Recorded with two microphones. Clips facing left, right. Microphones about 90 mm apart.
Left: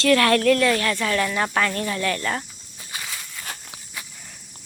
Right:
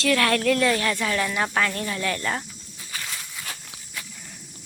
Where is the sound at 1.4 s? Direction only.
Centre (ahead or behind).